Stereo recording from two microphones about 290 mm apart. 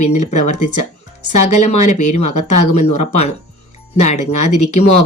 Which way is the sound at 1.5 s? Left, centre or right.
Left.